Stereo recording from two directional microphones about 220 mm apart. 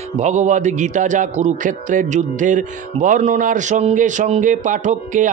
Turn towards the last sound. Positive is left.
turn(degrees=-35)  # may be behind; listen again after turning